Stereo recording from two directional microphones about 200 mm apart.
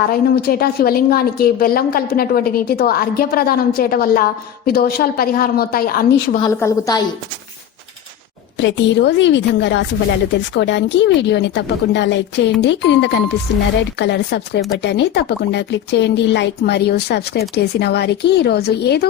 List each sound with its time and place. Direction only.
0.1 s a woman's voice: 50° left (ahead or behind)
6.4 s a woman's voice: 15° left (ahead or behind)
8.5 s a woman's voice: 60° left (ahead or behind)